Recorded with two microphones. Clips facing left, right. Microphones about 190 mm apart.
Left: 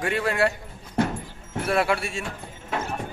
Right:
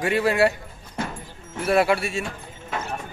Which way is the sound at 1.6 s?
5° right (ahead or behind).